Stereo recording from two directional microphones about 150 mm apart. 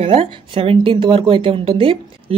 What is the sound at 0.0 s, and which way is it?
Speech, 40° right (ahead or behind).